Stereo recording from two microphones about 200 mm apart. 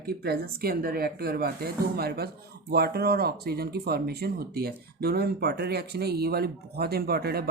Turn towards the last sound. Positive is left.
turn(degrees=-50)  # may be behind; listen again after turning